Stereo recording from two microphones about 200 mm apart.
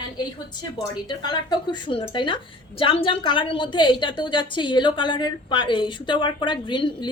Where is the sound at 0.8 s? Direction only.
20° left (ahead or behind).